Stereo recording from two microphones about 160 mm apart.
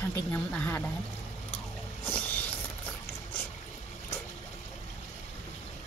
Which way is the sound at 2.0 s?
10° left (ahead or behind).